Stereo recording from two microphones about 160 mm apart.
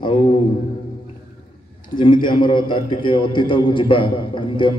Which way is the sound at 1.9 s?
30° left (ahead or behind).